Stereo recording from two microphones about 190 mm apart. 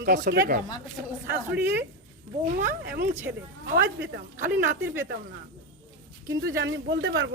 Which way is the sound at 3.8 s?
60° right (ahead or behind).